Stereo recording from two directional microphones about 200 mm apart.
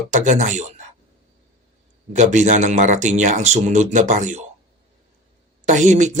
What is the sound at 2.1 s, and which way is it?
A man's voice, 35° right (ahead or behind).